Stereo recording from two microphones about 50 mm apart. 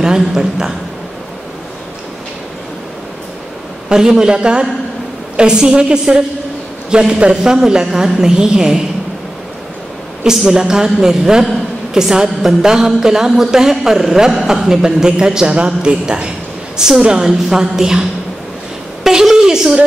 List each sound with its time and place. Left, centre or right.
0.0 s a man's voice: centre
3.9 s a woman's voice: centre
10.2 s a woman's voice: centre
19.0 s a woman's voice: centre